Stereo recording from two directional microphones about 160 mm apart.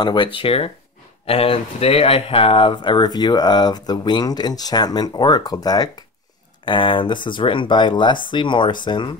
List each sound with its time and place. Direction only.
0.0 s speech: 30° left (ahead or behind)